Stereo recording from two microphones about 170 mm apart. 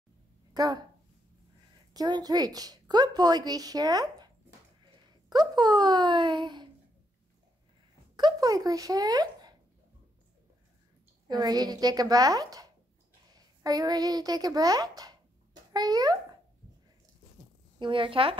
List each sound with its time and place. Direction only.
0.5 s speech: 20° right (ahead or behind)
2.0 s a woman's voice: 25° right (ahead or behind)
5.3 s speech: 25° right (ahead or behind)
8.2 s a sound: 25° right (ahead or behind)
11.2 s a woman's voice: 25° right (ahead or behind)
17.7 s a woman's voice: 30° right (ahead or behind)